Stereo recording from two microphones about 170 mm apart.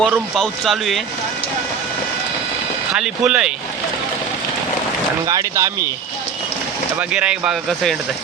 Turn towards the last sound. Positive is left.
turn(degrees=-5)  # may be behind; listen again after turning